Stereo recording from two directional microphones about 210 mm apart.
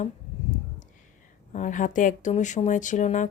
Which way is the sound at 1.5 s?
35° left (ahead or behind).